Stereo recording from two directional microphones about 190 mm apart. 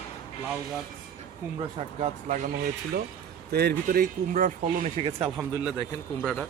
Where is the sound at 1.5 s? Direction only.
35° right (ahead or behind).